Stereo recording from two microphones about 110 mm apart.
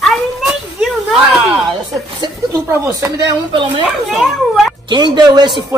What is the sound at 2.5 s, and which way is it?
Speech, 25° right (ahead or behind).